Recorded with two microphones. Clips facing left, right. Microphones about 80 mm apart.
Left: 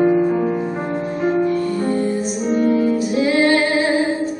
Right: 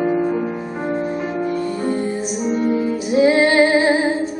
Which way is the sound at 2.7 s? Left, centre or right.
Right.